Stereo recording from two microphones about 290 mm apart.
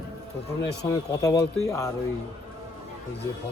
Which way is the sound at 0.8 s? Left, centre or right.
Centre.